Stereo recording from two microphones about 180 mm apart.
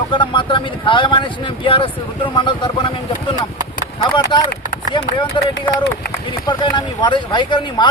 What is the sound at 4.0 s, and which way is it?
Speech, 25° left (ahead or behind).